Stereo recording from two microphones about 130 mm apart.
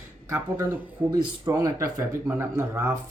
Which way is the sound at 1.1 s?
30° right (ahead or behind).